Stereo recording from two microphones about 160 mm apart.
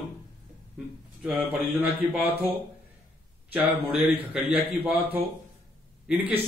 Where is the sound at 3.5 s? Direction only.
10° right (ahead or behind).